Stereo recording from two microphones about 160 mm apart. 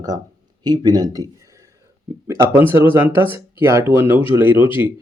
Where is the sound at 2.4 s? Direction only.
15° right (ahead or behind).